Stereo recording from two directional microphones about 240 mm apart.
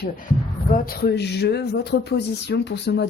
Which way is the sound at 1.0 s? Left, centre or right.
Left.